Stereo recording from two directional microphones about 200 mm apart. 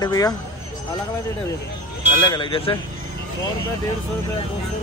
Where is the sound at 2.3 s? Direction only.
25° left (ahead or behind).